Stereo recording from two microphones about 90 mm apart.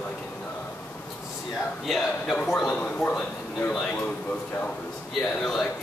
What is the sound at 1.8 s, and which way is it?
Speech, centre (ahead or behind).